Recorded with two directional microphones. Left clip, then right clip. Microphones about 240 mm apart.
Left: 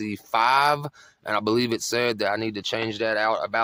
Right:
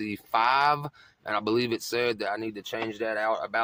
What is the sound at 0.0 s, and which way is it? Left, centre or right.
Speech, left.